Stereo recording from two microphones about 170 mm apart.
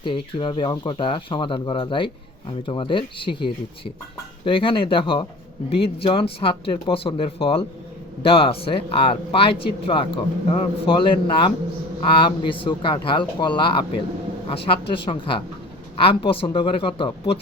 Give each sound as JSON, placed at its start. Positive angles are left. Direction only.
{"t": 0.0, "sound": "speech", "side_deg": 30}